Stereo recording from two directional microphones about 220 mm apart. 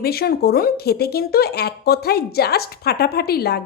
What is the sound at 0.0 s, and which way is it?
Speech, 45° left (ahead or behind).